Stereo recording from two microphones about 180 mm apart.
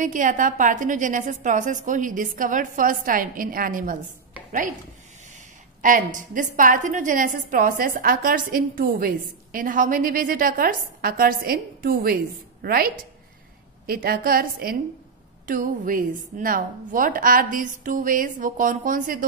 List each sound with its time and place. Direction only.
0.0 s a woman's voice: 45° right (ahead or behind)
5.8 s a woman's voice: 45° right (ahead or behind)